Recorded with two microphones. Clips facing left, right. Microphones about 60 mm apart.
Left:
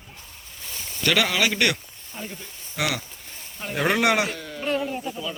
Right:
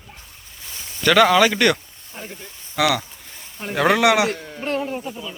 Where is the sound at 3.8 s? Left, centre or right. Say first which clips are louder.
Right 5 dB; right.